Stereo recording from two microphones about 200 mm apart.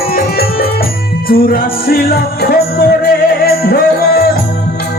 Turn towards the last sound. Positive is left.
turn(degrees=50)  # may be behind; listen again after turning